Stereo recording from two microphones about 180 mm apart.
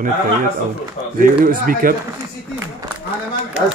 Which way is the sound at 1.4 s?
50° right (ahead or behind).